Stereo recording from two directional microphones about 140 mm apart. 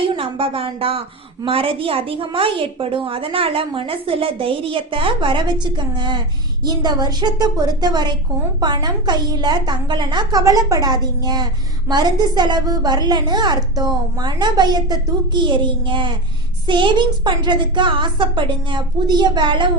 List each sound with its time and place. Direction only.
0.0 s a woman's voice: 40° right (ahead or behind)